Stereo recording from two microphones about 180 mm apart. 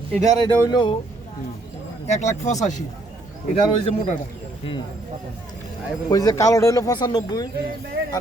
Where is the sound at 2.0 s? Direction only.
40° left (ahead or behind).